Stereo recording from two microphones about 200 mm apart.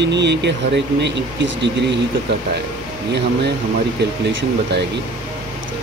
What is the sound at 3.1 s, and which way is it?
Speech, 60° right (ahead or behind).